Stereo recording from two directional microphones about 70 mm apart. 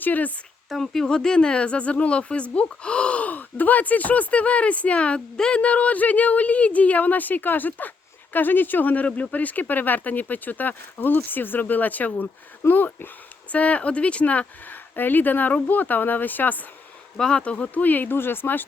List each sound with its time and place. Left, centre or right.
0.0 s speech: left
0.7 s speech: centre; by 16.6 s left
17.2 s speech: centre; by 18.6 s left